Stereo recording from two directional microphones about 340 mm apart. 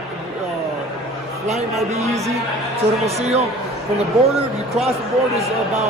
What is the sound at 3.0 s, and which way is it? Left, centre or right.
Speech, centre.